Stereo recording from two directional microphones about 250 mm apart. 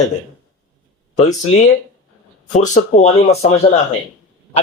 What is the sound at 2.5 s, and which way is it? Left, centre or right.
Speech, left.